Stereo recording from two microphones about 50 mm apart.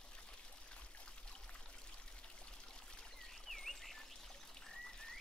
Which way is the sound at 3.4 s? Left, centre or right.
Centre.